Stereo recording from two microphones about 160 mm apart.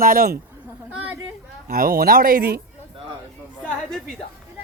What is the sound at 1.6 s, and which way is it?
Speech, 70° right (ahead or behind).